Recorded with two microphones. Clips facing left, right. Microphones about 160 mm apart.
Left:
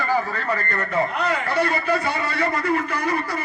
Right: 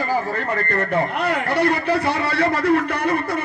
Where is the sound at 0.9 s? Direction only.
60° right (ahead or behind).